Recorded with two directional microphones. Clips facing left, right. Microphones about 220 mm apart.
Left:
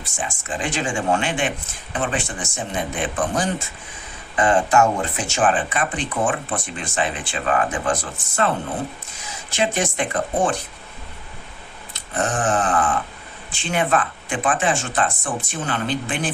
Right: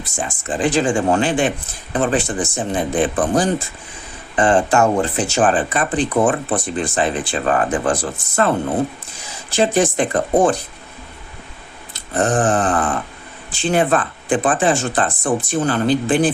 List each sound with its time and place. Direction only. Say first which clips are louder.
0.0 s speech: right 4 dB; 35° right (ahead or behind)
9.5 s speech: right 6 dB; 35° right (ahead or behind)
11.9 s a sound: right 6 dB; 35° right (ahead or behind)
13.5 s speech: right 5 dB; 35° right (ahead or behind)